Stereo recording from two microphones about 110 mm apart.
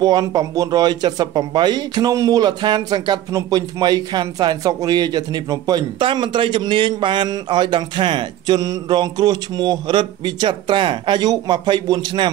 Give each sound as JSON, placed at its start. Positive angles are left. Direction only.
{"t": 0.0, "sound": "speech", "side_deg": -35}